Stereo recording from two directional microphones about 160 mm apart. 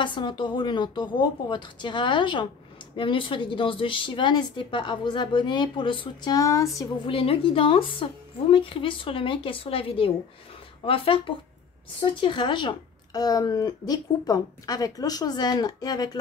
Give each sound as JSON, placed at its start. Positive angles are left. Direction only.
{"t": 0.0, "sound": "a woman's voice", "side_deg": 30}
{"t": 7.1, "sound": "a woman's voice", "side_deg": 35}